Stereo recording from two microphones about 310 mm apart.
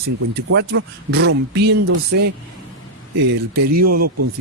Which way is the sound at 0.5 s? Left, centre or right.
Right.